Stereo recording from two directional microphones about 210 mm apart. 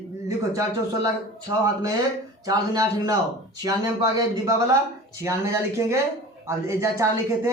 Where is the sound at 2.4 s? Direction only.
15° right (ahead or behind).